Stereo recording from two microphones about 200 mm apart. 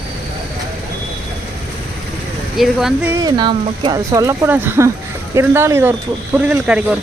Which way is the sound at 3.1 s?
20° right (ahead or behind).